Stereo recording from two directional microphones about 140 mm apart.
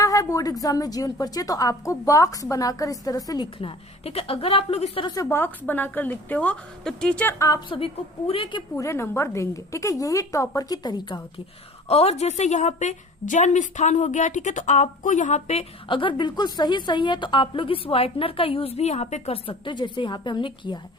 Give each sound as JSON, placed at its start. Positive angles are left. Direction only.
{"t": 0.0, "sound": "a woman's voice", "side_deg": 25}
{"t": 5.0, "sound": "a woman's voice", "side_deg": 25}
{"t": 7.3, "sound": "a woman's voice", "side_deg": 25}
{"t": 8.3, "sound": "a woman's voice", "side_deg": 40}
{"t": 8.7, "sound": "a woman's voice", "side_deg": 20}
{"t": 11.9, "sound": "a woman's voice", "side_deg": 50}
{"t": 15.9, "sound": "a woman's voice", "side_deg": 35}